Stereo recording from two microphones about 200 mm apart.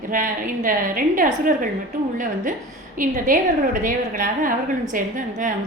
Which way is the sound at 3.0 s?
40° right (ahead or behind).